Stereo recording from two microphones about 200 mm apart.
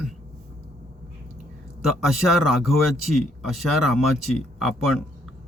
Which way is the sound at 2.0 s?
Centre (ahead or behind).